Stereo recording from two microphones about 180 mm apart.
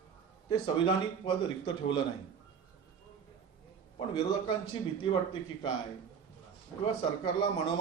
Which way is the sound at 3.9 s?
25° left (ahead or behind).